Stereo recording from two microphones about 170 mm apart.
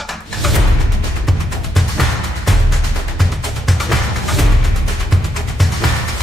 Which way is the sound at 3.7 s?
Centre (ahead or behind).